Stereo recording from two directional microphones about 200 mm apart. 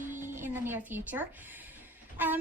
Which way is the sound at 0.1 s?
40° right (ahead or behind).